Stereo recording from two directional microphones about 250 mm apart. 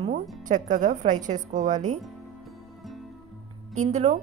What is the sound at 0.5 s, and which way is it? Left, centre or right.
A woman's voice, right.